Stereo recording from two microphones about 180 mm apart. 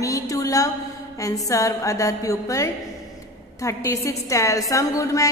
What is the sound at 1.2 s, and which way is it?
A woman's voice, 20° left (ahead or behind).